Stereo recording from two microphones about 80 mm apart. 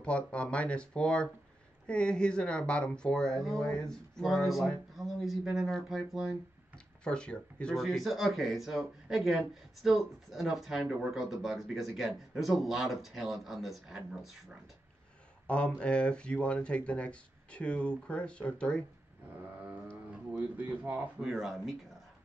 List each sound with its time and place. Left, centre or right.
0.0 s speech: centre
7.1 s speech: centre
7.7 s speech: centre
15.4 s speech: centre
20.3 s speech: right
21.2 s speech: centre